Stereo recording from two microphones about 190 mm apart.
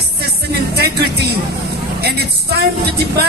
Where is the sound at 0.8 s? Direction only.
60° right (ahead or behind).